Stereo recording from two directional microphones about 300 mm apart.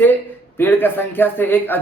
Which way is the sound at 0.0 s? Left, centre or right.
Centre.